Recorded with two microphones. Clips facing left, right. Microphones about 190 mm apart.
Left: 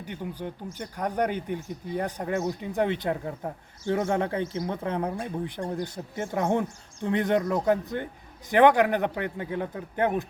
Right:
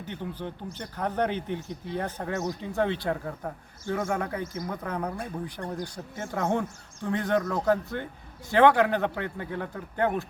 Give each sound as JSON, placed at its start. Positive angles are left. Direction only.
{"t": 0.0, "sound": "speech", "side_deg": 10}
{"t": 5.5, "sound": "speech", "side_deg": 15}